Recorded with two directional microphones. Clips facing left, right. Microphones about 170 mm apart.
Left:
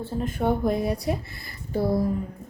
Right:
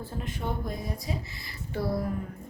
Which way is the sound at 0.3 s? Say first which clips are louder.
Left 12 dB; 65° left (ahead or behind).